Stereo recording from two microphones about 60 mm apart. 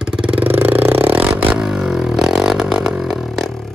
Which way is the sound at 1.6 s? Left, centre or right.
Centre.